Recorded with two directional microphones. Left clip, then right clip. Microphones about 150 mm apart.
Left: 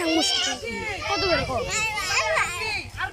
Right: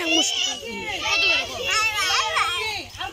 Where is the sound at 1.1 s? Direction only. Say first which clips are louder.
Right 3 dB; 35° left (ahead or behind).